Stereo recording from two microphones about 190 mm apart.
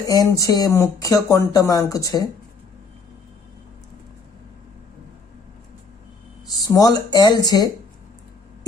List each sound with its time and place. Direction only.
0.1 s speech: 20° left (ahead or behind)
6.7 s speech: 20° left (ahead or behind)